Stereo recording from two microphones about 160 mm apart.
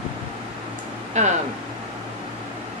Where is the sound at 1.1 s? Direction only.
45° right (ahead or behind).